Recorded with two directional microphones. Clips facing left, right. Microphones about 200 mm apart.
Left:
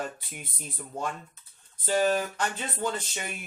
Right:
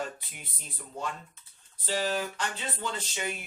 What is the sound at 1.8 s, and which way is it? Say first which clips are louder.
Speech: left 5 dB; 50° left (ahead or behind).